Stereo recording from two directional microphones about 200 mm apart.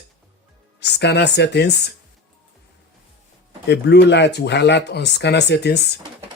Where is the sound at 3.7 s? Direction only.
55° left (ahead or behind).